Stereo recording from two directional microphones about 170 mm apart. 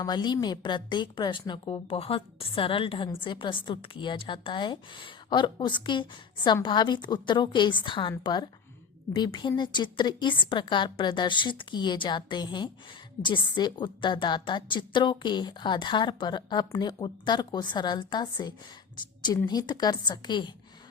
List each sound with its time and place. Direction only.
0.0 s a woman's voice: 25° left (ahead or behind)